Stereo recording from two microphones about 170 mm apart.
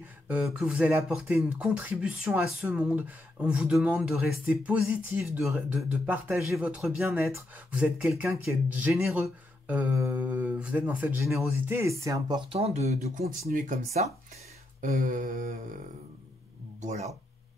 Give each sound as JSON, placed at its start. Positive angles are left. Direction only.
{"t": 0.6, "sound": "speech", "side_deg": -5}
{"t": 6.5, "sound": "speech", "side_deg": -5}
{"t": 12.4, "sound": "speech", "side_deg": -35}
{"t": 13.5, "sound": "a sound", "side_deg": -50}
{"t": 16.8, "sound": "speech", "side_deg": -40}